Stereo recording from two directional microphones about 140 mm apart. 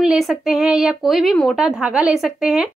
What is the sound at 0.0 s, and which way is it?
Speech, centre (ahead or behind).